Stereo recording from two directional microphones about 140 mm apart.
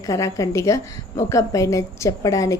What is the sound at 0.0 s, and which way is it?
A woman's voice, 25° left (ahead or behind).